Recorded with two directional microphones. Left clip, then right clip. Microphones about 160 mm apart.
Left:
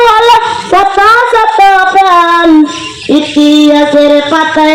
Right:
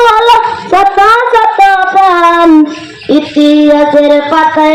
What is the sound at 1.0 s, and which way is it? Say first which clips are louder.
Speech: left 1 dB; 35° left (ahead or behind).